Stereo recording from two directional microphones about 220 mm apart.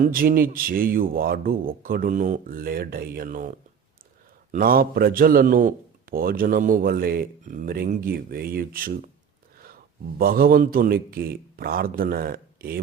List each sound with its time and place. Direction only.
0.0 s a man's voice: 40° right (ahead or behind)
4.5 s a man's voice: 40° right (ahead or behind)
10.2 s a man's voice: 40° right (ahead or behind)